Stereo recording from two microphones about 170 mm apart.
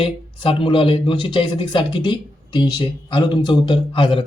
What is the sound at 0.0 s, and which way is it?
Speech, 30° left (ahead or behind).